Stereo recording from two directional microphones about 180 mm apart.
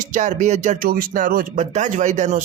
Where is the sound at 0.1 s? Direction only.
45° right (ahead or behind).